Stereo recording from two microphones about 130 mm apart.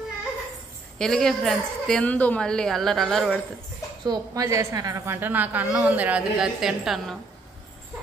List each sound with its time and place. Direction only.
0.9 s a woman's voice: 5° left (ahead or behind)
4.0 s a woman's voice: 30° right (ahead or behind); by 7.2 s centre (ahead or behind)